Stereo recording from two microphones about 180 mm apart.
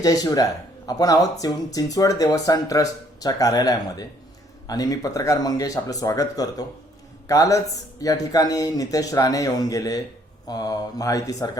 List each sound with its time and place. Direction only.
0.0 s speech: 20° left (ahead or behind)